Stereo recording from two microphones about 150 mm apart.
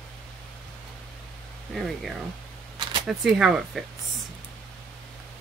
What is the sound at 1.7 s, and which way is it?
Speech, centre (ahead or behind).